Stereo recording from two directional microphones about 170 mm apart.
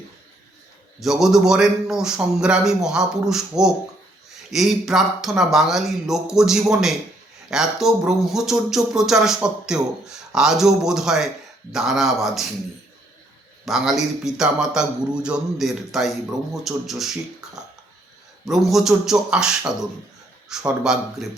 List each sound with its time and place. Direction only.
0.9 s speech: centre (ahead or behind)
13.7 s speech: centre (ahead or behind)
18.4 s speech: centre (ahead or behind)